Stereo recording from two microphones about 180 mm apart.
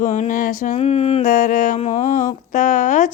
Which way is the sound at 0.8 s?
35° left (ahead or behind).